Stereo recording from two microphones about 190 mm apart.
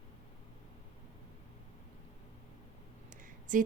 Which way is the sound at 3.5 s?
45° right (ahead or behind).